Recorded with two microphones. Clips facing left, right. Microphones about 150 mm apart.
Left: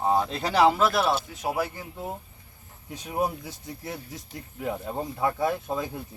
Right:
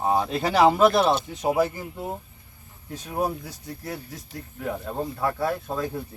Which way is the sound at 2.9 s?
15° left (ahead or behind).